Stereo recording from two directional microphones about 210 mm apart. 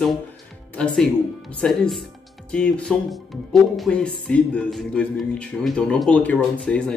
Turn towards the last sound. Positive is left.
turn(degrees=5)  # may be behind; listen again after turning